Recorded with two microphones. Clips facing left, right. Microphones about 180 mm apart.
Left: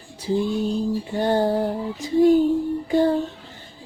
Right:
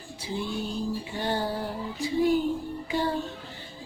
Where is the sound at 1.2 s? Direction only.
50° left (ahead or behind).